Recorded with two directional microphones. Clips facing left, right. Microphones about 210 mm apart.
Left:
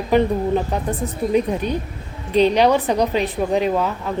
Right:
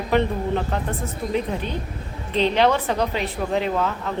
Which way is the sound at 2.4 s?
15° left (ahead or behind).